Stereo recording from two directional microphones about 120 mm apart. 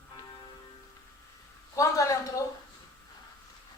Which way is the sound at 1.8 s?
25° left (ahead or behind).